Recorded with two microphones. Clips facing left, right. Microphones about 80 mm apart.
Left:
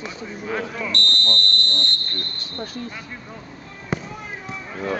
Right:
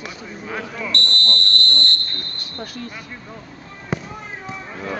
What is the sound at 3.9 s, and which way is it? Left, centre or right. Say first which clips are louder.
Fireworks: right 1 dB; centre.